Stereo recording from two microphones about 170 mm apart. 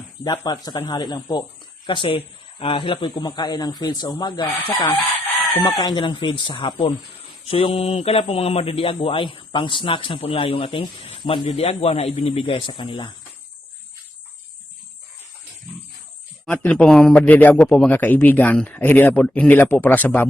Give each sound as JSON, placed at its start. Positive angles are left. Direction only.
{"t": 0.3, "sound": "speech", "side_deg": 25}
{"t": 16.5, "sound": "a man's voice", "side_deg": 5}